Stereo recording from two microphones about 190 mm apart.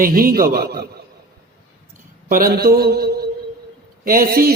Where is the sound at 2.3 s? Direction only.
50° right (ahead or behind).